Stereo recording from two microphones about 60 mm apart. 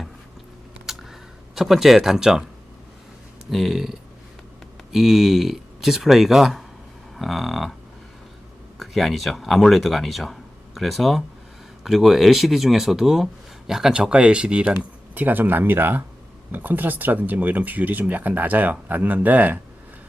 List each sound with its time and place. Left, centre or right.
0.9 s a sound: centre
1.5 s speech: centre
3.5 s speech: centre
8.8 s speech: centre
14.8 s speech: right